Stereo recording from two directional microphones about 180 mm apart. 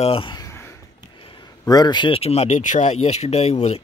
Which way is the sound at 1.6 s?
20° left (ahead or behind).